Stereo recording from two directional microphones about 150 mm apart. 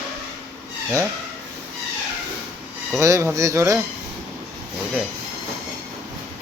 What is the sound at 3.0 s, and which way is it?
Speech, 20° right (ahead or behind).